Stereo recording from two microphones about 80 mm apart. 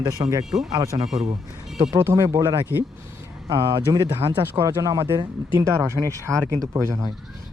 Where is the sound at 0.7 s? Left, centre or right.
Right.